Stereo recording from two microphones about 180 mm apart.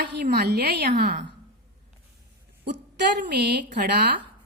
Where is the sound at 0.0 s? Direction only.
65° right (ahead or behind).